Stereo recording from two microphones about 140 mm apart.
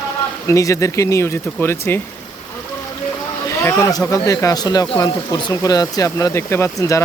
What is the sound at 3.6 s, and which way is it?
Speech, 20° left (ahead or behind).